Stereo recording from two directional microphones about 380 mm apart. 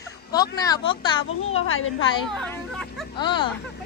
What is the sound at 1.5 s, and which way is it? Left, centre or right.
Speech, left.